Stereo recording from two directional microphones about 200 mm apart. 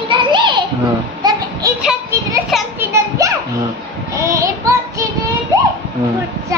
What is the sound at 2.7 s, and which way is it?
Children playing, 15° right (ahead or behind).